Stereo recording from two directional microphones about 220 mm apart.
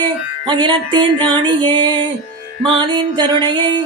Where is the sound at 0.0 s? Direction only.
20° right (ahead or behind).